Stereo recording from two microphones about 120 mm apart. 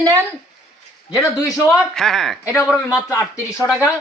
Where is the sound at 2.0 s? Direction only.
5° left (ahead or behind).